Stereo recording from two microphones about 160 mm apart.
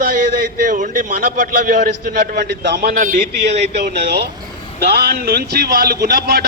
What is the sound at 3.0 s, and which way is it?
Speech, 55° right (ahead or behind).